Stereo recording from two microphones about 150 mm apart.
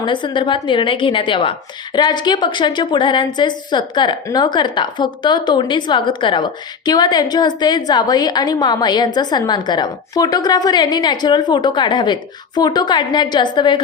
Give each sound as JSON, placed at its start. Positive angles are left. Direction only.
{"t": 0.0, "sound": "a woman's voice", "side_deg": 30}